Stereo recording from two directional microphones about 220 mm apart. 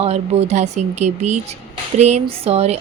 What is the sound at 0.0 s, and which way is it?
A woman's voice, 30° right (ahead or behind).